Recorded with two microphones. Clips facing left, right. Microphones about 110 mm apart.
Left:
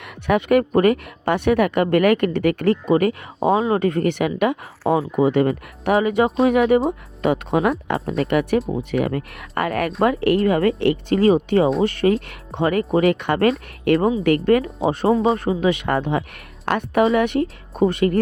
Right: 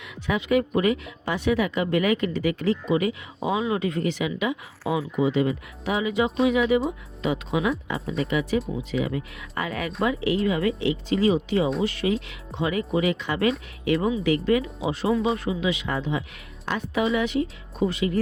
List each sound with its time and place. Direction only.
0.0 s speech: 60° left (ahead or behind)
3.4 s speech: 35° left (ahead or behind)
3.8 s speech: 55° left (ahead or behind)
15.0 s speech: 30° left (ahead or behind)
15.6 s speech: 60° left (ahead or behind)